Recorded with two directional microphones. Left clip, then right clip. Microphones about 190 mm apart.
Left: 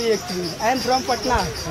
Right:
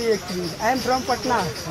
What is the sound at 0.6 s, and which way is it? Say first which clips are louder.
Speech: left 1 dB; 5° right (ahead or behind).